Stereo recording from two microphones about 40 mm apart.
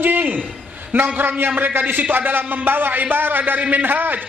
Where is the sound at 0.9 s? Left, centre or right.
Right.